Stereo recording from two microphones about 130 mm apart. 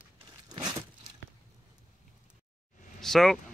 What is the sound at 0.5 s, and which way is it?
Crumpling, 35° right (ahead or behind).